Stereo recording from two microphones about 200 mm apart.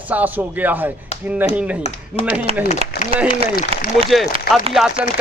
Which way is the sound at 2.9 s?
50° left (ahead or behind).